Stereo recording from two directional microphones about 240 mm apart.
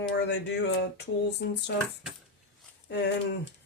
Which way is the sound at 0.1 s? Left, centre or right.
Left.